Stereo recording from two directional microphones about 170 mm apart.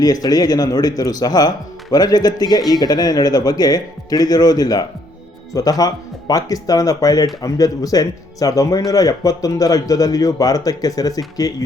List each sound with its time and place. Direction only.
0.0 s speech: 20° left (ahead or behind)